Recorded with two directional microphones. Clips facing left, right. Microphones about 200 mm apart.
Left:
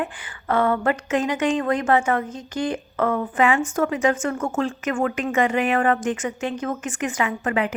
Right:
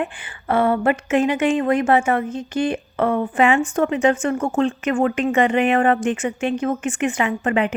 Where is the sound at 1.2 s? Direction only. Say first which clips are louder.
Right 5 dB; 10° right (ahead or behind).